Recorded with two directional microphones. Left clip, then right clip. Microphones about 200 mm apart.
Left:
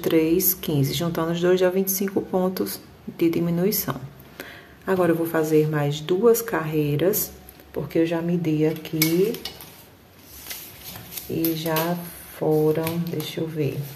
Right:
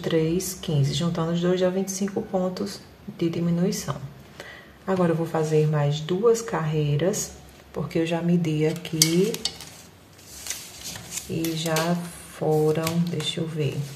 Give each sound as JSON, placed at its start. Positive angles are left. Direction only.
{"t": 0.0, "sound": "a woman's voice", "side_deg": 35}
{"t": 7.7, "sound": "speech", "side_deg": 10}
{"t": 11.3, "sound": "speech", "side_deg": 5}